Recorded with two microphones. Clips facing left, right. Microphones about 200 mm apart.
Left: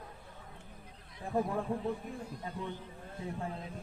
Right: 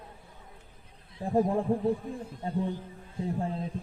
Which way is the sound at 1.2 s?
30° right (ahead or behind).